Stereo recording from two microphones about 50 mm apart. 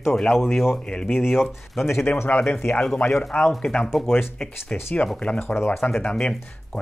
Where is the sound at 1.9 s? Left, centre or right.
Left.